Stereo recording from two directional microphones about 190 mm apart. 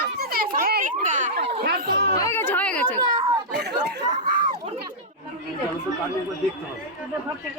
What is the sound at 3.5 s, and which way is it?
Speech, 60° right (ahead or behind).